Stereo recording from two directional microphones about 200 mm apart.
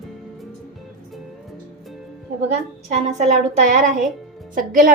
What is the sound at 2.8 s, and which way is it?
A woman's voice, 35° right (ahead or behind).